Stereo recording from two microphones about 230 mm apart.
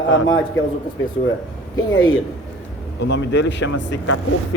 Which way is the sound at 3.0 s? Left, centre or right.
Left.